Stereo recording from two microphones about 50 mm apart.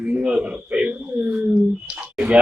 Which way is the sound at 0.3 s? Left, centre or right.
Right.